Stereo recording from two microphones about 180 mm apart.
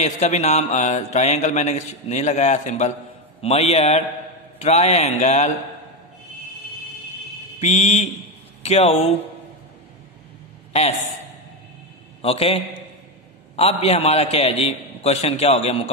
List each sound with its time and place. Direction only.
0.0 s mantra: 40° left (ahead or behind)
7.6 s mantra: 35° left (ahead or behind)
10.7 s a man's voice: 35° left (ahead or behind)
12.2 s a man's voice: 30° left (ahead or behind)
13.6 s mantra: 35° left (ahead or behind)